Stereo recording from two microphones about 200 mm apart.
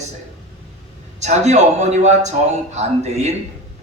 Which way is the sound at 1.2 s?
35° right (ahead or behind).